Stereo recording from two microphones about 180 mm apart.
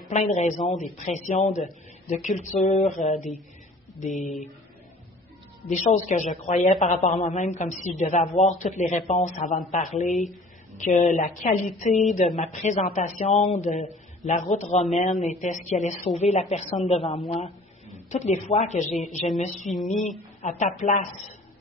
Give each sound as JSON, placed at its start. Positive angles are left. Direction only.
{"t": 0.1, "sound": "a man's voice", "side_deg": 40}
{"t": 5.7, "sound": "a man's voice", "side_deg": 40}